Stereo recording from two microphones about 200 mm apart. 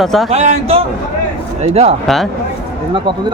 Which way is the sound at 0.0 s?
Centre (ahead or behind).